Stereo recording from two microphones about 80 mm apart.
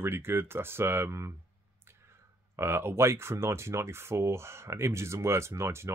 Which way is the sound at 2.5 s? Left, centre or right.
Right.